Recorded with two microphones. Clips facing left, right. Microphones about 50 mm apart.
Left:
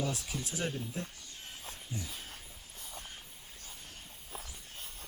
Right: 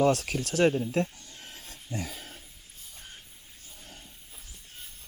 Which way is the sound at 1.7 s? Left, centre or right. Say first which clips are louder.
Right 8 dB; right.